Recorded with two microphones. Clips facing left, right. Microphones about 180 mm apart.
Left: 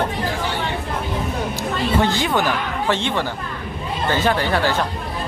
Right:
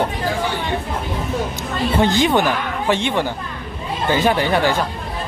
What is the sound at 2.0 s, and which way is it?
Speech, 20° right (ahead or behind).